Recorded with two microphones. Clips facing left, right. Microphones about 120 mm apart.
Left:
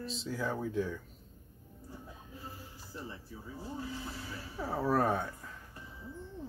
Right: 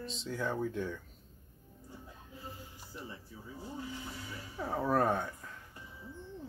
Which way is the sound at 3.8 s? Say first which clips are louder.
Left 1 dB; 20° right (ahead or behind).